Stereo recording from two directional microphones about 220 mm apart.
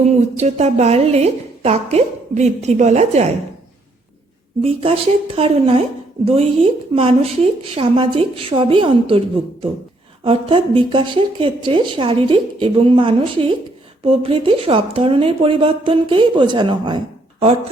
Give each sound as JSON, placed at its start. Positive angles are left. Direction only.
{"t": 0.0, "sound": "a woman's voice", "side_deg": -30}
{"t": 4.6, "sound": "a woman's voice", "side_deg": -25}